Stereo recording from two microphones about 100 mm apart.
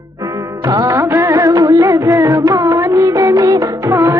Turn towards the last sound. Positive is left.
turn(degrees=-30)  # may be behind; listen again after turning